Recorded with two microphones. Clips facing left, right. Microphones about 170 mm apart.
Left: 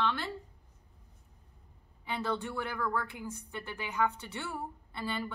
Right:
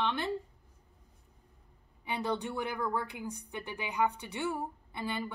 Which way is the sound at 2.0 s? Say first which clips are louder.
Right 1 dB; 15° right (ahead or behind).